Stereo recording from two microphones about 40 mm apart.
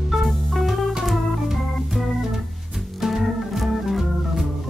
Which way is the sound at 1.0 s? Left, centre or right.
Centre.